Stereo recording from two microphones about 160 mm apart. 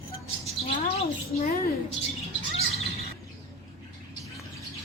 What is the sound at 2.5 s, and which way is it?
Chirp, 40° left (ahead or behind).